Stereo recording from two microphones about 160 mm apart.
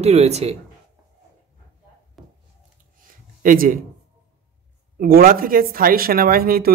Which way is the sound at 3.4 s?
60° right (ahead or behind).